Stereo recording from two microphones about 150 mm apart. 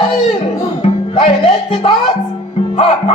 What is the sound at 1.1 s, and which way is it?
Music, 40° left (ahead or behind).